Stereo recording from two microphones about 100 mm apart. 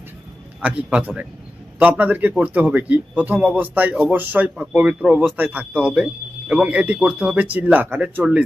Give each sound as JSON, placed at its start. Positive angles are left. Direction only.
{"t": 0.6, "sound": "a man's voice", "side_deg": -15}